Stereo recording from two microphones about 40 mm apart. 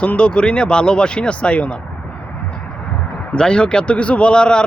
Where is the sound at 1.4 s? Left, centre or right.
Left.